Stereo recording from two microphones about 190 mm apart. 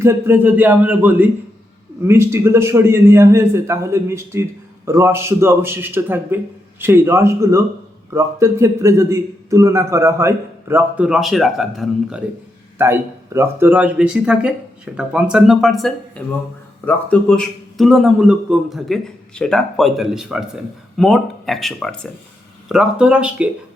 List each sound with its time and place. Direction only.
0.0 s a man's voice: 10° right (ahead or behind)
12.8 s a man's voice: 15° right (ahead or behind)